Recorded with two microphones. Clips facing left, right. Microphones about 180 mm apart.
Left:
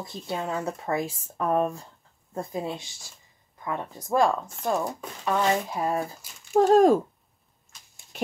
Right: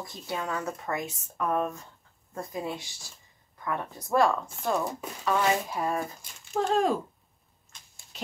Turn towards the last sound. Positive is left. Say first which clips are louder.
# left 8 dB
turn(degrees=45)  # may be behind; listen again after turning